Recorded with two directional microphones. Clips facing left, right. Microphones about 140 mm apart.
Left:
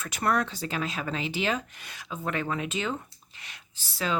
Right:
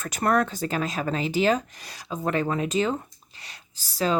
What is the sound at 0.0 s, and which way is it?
Speech, 45° right (ahead or behind).